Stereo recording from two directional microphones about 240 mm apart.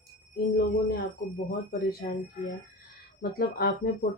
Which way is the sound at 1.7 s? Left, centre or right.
Left.